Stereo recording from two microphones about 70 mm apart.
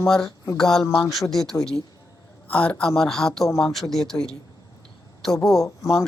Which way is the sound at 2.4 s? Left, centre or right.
Centre.